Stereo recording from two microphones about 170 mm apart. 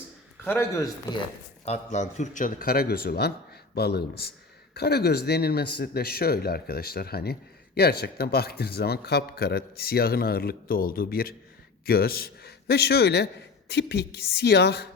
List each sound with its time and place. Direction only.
0.4 s speech: 15° left (ahead or behind)
1.6 s a man's voice: 40° left (ahead or behind); by 14.8 s 75° left (ahead or behind)